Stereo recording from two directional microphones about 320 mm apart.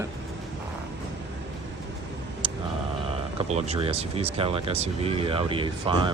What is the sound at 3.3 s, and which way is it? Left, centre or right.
Speech, centre.